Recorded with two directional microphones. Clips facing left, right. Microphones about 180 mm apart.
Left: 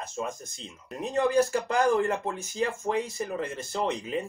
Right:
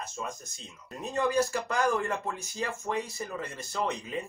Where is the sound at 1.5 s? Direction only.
30° left (ahead or behind).